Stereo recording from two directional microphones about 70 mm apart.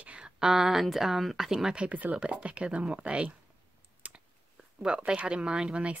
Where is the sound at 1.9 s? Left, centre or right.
Right.